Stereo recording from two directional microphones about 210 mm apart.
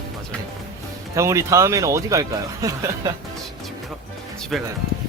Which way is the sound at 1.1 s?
15° right (ahead or behind).